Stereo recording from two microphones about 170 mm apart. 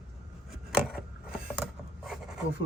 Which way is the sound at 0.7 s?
5° right (ahead or behind).